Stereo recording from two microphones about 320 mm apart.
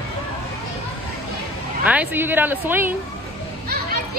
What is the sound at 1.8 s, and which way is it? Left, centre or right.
A woman's voice, centre.